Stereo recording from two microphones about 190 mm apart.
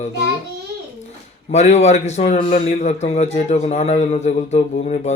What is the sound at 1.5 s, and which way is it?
A man's voice, 35° left (ahead or behind).